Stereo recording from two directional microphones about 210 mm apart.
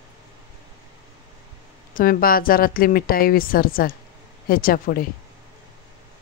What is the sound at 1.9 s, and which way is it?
Speech, 45° left (ahead or behind).